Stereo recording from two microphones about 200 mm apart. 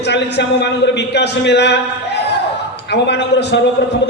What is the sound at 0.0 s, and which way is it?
A man's voice, 60° left (ahead or behind).